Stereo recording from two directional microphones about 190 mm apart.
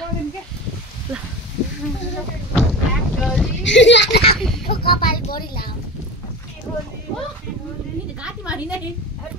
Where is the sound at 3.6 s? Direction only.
70° left (ahead or behind).